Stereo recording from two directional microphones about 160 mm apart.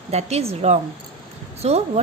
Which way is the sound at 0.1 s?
40° right (ahead or behind).